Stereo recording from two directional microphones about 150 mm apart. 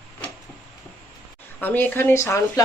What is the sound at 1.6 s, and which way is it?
Speech, 10° left (ahead or behind).